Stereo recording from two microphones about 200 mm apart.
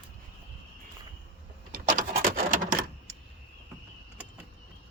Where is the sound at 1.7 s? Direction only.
45° right (ahead or behind).